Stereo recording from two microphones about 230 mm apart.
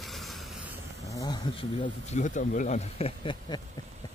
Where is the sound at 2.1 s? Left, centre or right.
Left.